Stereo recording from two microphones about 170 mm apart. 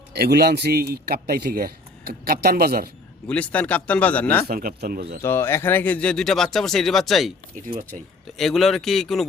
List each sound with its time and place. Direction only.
0.1 s speech: 70° right (ahead or behind)
3.2 s speech: 10° left (ahead or behind)
4.4 s speech: 60° right (ahead or behind)
5.2 s speech: 15° left (ahead or behind)
7.5 s speech: 55° right (ahead or behind)
8.4 s speech: centre (ahead or behind)